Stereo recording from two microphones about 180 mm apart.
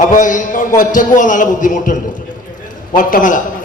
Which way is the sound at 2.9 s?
45° left (ahead or behind).